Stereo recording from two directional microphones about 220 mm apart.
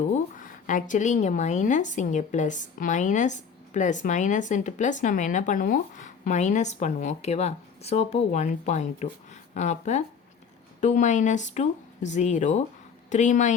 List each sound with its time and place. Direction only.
0.3 s a woman's voice: 35° left (ahead or behind)